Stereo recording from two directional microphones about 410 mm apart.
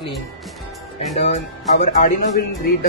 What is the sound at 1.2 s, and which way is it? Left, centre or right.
Speech, centre.